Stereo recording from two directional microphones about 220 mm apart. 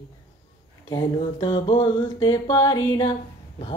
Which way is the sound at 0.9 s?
20° left (ahead or behind).